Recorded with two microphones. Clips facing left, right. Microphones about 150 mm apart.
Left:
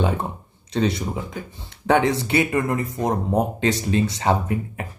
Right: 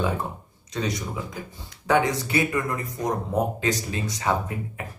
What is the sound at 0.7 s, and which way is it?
Speech, 30° left (ahead or behind).